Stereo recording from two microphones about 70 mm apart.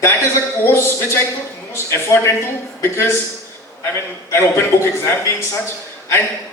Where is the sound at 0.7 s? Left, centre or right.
Left.